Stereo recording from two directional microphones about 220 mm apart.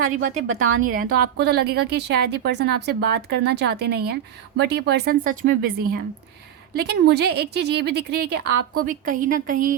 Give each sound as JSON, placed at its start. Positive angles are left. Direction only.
{"t": 0.0, "sound": "a woman's voice", "side_deg": -35}
{"t": 0.4, "sound": "a woman's voice", "side_deg": -70}
{"t": 0.8, "sound": "a woman's voice", "side_deg": -40}
{"t": 6.7, "sound": "a woman's voice", "side_deg": -45}
{"t": 8.8, "sound": "a woman's voice", "side_deg": -40}